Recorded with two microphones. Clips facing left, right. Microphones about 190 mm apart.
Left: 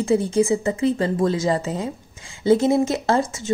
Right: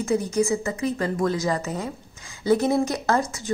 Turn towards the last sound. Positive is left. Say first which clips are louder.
# left 3 dB
turn(degrees=25)  # may be behind; listen again after turning